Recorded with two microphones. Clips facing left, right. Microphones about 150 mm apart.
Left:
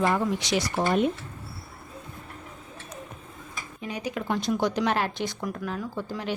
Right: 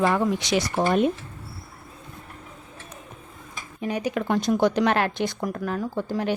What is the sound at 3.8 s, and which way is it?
A woman's voice, 55° right (ahead or behind).